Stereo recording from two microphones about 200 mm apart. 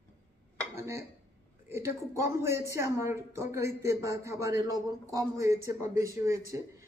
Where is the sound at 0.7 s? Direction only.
15° right (ahead or behind).